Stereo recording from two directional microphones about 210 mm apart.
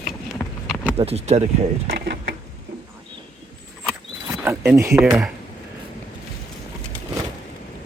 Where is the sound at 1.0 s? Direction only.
30° right (ahead or behind).